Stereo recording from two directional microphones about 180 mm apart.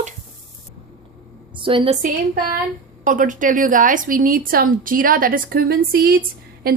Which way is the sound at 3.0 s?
45° right (ahead or behind).